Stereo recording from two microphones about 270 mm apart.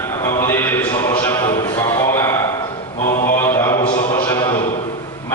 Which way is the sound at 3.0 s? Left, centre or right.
Left.